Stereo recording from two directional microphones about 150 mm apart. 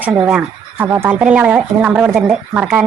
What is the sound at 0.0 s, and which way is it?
Speech, 10° right (ahead or behind).